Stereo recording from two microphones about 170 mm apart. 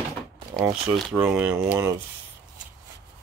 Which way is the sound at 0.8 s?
Centre (ahead or behind).